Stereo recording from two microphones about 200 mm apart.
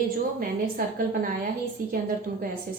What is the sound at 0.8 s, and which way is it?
Speech, 45° right (ahead or behind).